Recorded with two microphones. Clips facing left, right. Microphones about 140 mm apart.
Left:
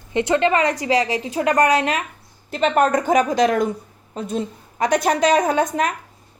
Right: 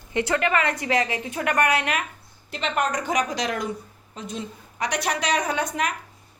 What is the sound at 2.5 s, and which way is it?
A woman's voice, 45° left (ahead or behind).